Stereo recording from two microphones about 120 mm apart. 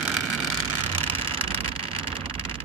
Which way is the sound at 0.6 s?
45° right (ahead or behind).